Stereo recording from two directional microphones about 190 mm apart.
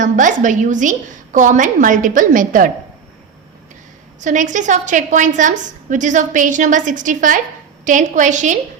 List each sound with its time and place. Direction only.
0.0 s a woman's voice: 40° right (ahead or behind)
4.2 s a woman's voice: 40° right (ahead or behind)